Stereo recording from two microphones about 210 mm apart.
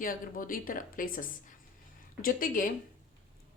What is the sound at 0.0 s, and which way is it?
Speech, 40° left (ahead or behind).